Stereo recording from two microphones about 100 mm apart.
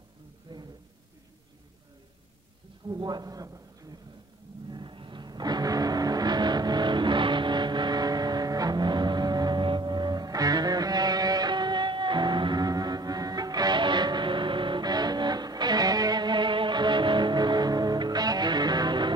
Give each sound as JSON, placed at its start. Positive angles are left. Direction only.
{"t": 0.5, "sound": "a sound", "side_deg": -45}
{"t": 2.9, "sound": "speech", "side_deg": -45}
{"t": 4.6, "sound": "music", "side_deg": -50}